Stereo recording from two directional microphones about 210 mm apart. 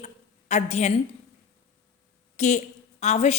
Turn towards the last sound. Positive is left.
turn(degrees=30)  # may be behind; listen again after turning